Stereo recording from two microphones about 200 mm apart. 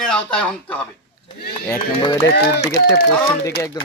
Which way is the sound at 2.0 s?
15° left (ahead or behind).